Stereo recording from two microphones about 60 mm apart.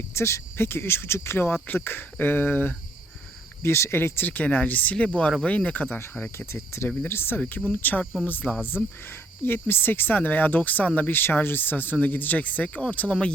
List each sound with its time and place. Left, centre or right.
0.1 s speech: left
1.5 s speech: left
3.6 s speech: left
6.3 s speech: left
7.3 s speech: left
11.1 s speech: left